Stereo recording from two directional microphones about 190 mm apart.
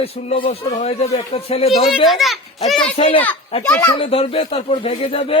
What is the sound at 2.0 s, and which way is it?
Speech, centre (ahead or behind).